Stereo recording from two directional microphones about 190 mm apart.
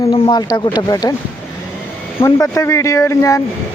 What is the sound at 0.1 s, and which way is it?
Speech, 25° left (ahead or behind).